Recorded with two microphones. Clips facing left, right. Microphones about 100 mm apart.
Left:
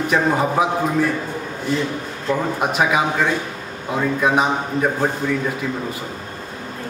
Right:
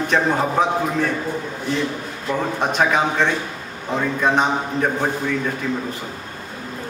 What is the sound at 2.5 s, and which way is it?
A man's voice, 5° left (ahead or behind).